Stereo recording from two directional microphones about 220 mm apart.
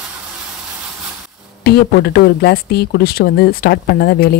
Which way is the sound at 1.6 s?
45° left (ahead or behind).